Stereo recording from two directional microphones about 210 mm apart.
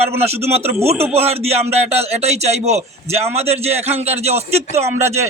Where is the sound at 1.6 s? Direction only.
30° right (ahead or behind).